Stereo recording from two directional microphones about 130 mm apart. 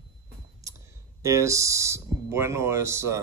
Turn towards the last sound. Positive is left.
turn(degrees=-20)  # may be behind; listen again after turning